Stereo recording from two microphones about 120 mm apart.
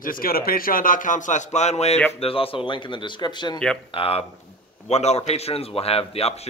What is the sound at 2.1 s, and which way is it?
A man's voice, 55° left (ahead or behind).